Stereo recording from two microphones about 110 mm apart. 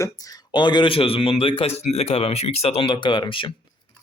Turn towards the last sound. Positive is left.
turn(degrees=50)  # may be behind; listen again after turning